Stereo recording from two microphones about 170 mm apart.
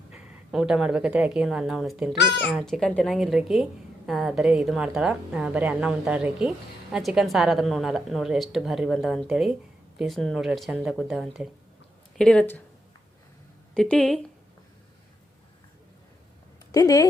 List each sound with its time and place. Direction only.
0.1 s a woman's voice: 5° right (ahead or behind)
13.7 s a woman's voice: 5° left (ahead or behind)
16.7 s speech: 20° left (ahead or behind)